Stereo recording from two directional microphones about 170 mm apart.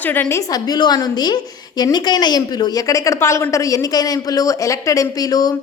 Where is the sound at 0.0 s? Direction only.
10° left (ahead or behind).